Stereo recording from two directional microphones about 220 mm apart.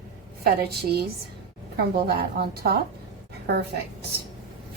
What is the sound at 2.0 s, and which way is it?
Speech, 45° right (ahead or behind).